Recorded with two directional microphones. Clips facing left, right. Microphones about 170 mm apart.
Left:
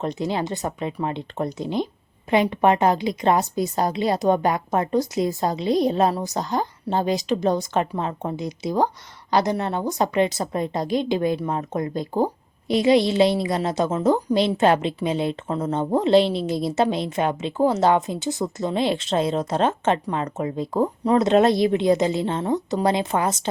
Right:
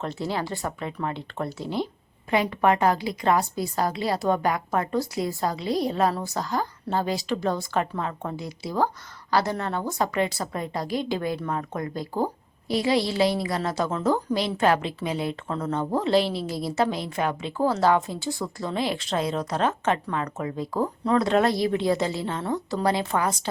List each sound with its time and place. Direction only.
0.0 s a woman's voice: 20° left (ahead or behind)